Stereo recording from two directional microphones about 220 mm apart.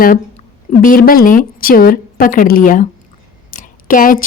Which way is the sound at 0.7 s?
40° left (ahead or behind).